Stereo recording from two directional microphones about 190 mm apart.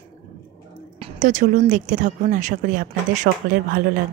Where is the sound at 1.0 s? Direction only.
40° right (ahead or behind).